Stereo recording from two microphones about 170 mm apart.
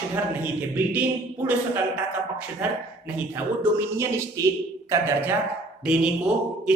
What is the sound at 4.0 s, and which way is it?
A man's voice, 15° right (ahead or behind).